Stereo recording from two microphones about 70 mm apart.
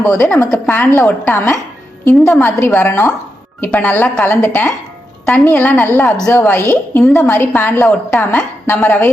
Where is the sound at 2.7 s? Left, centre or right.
Left.